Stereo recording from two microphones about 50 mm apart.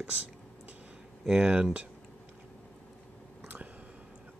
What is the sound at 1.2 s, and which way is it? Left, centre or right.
Speech, centre.